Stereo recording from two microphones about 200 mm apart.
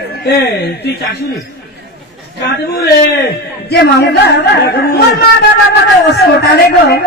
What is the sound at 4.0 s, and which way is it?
A woman's voice, 55° left (ahead or behind).